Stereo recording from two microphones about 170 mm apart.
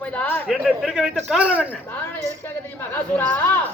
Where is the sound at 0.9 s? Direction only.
Centre (ahead or behind).